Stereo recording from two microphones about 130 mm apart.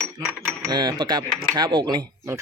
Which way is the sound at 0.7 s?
30° right (ahead or behind).